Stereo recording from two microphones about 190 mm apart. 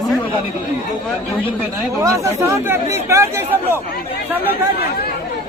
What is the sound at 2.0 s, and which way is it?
Speech, 15° right (ahead or behind).